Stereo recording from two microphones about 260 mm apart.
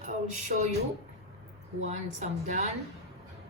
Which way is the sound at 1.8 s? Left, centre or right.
Right.